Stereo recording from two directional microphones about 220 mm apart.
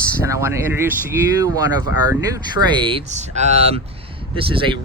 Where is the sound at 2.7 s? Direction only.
20° right (ahead or behind).